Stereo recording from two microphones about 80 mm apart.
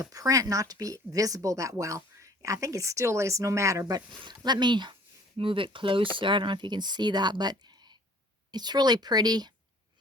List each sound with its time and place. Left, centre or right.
0.0 s speech: right
4.2 s speech: right
5.4 s speech: right